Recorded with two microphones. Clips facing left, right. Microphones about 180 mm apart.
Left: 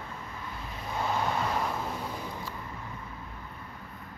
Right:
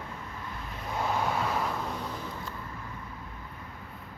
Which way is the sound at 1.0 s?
Centre (ahead or behind).